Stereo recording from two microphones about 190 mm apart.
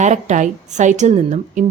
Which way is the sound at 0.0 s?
40° right (ahead or behind).